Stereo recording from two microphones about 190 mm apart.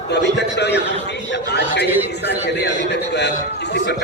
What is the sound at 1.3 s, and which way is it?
A man's voice, 65° left (ahead or behind).